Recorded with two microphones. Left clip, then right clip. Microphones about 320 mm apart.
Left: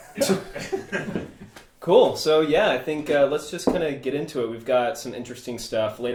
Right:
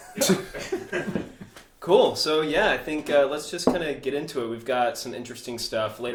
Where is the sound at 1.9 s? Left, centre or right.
Left.